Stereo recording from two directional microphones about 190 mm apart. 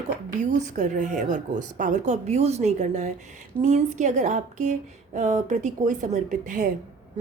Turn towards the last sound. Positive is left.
turn(degrees=-40)  # may be behind; listen again after turning